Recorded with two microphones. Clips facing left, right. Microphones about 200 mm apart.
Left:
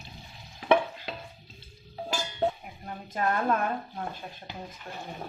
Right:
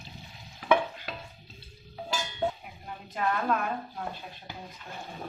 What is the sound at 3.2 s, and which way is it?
Speech, 45° left (ahead or behind).